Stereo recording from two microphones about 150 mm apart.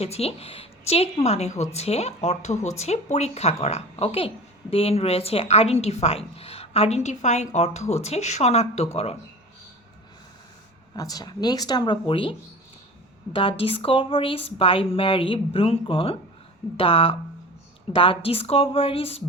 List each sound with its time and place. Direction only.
0.0 s a woman's voice: 45° left (ahead or behind)
10.9 s speech: 25° left (ahead or behind); by 19.2 s 40° left (ahead or behind)